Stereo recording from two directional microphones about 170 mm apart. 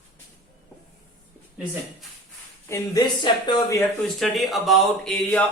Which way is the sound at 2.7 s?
25° left (ahead or behind).